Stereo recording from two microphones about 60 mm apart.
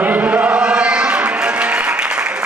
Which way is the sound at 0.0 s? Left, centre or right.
Centre.